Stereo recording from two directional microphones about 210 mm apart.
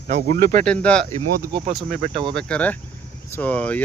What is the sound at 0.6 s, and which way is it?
Speech, 5° left (ahead or behind).